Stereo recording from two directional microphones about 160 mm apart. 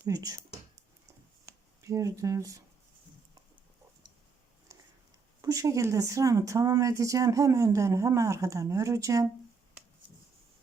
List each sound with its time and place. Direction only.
0.1 s speech: 25° right (ahead or behind)
1.8 s speech: 20° right (ahead or behind)
5.4 s speech: 20° right (ahead or behind)